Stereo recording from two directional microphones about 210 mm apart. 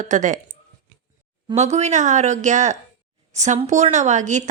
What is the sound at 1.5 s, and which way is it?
A woman's voice, 30° right (ahead or behind).